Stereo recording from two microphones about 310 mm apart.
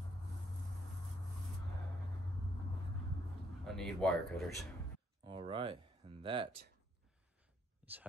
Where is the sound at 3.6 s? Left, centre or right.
Centre.